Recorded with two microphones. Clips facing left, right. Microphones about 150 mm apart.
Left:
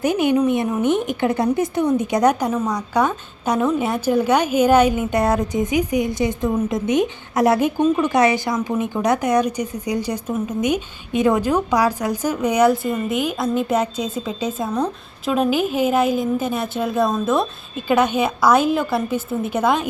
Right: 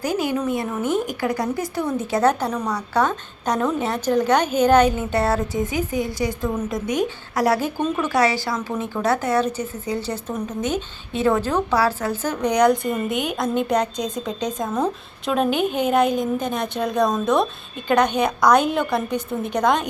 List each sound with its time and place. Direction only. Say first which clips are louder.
0.0 s a woman's voice: left 5 dB; 20° left (ahead or behind); by 19.9 s 5° left (ahead or behind)